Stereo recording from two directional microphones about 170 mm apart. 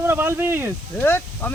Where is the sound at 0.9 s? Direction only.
10° left (ahead or behind).